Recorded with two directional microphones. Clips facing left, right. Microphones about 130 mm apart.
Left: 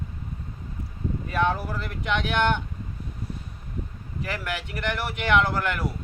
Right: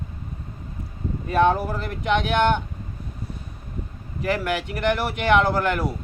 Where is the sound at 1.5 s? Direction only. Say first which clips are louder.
Right 5 dB; 45° right (ahead or behind).